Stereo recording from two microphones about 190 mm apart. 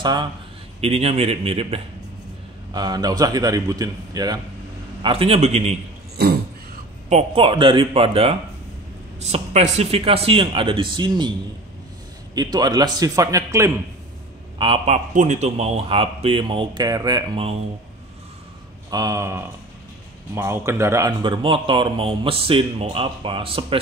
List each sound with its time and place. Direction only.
0.0 s a man's voice: 25° right (ahead or behind)
5.0 s a man's voice: 30° right (ahead or behind)
7.1 s speech: 30° right (ahead or behind)
12.4 s speech: 20° right (ahead or behind)
14.6 s speech: 30° right (ahead or behind)
18.9 s speech: 20° right (ahead or behind)
21.2 s speech: 25° right (ahead or behind)